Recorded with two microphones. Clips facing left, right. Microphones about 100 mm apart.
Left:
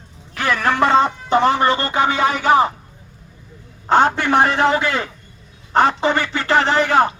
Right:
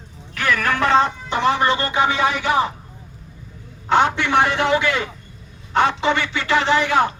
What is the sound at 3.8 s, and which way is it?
A man's voice, 40° left (ahead or behind).